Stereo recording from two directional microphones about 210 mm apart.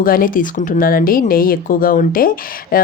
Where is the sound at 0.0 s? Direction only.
40° left (ahead or behind).